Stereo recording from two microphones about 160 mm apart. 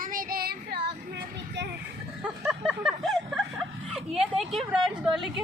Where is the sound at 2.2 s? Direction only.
10° right (ahead or behind).